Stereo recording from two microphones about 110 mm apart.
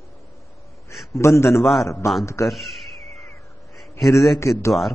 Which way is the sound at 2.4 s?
Centre (ahead or behind).